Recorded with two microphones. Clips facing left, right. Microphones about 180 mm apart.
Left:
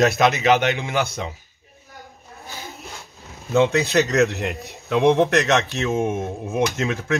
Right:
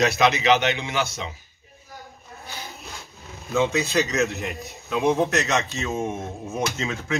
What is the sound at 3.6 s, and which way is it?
A man's voice, 60° left (ahead or behind).